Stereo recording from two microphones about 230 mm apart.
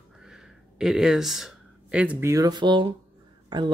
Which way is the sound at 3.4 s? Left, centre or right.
Centre.